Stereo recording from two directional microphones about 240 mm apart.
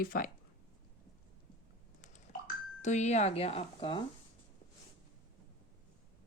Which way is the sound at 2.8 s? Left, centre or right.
Left.